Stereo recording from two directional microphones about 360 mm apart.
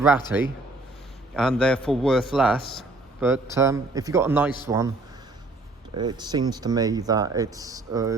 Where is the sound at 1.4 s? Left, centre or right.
Centre.